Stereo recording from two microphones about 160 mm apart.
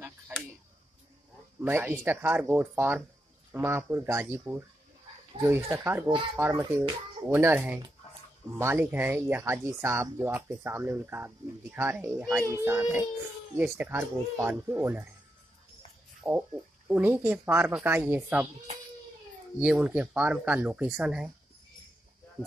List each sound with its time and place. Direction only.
0.3 s a sound: 10° right (ahead or behind)
1.6 s speech: 10° right (ahead or behind)
16.3 s speech: 10° right (ahead or behind)
19.6 s speech: 10° right (ahead or behind)